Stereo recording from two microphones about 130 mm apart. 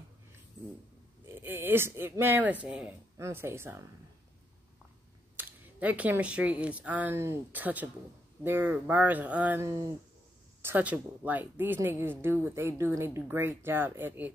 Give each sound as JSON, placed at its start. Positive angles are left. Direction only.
{"t": 1.2, "sound": "speech", "side_deg": -20}
{"t": 3.2, "sound": "speech", "side_deg": -20}
{"t": 5.3, "sound": "a woman's voice", "side_deg": -15}